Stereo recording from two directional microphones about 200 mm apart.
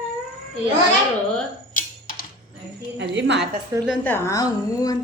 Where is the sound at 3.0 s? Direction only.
60° right (ahead or behind).